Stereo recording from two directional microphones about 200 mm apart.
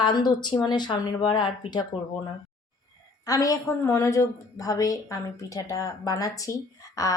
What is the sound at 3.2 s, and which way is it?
A woman's voice, 15° left (ahead or behind).